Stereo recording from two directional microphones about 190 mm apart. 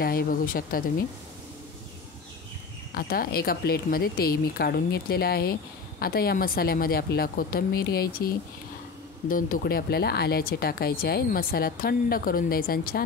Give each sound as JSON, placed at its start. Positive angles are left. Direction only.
{"t": 0.0, "sound": "speech", "side_deg": 50}
{"t": 2.9, "sound": "speech", "side_deg": 50}
{"t": 9.3, "sound": "speech", "side_deg": 50}